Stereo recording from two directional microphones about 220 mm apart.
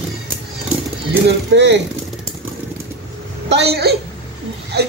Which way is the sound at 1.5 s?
50° right (ahead or behind).